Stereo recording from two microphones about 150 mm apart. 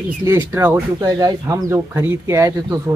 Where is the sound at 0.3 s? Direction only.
15° right (ahead or behind).